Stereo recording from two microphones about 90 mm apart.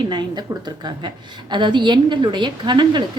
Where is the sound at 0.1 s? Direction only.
55° right (ahead or behind).